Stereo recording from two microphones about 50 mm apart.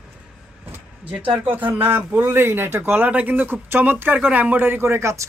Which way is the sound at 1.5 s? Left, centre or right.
Right.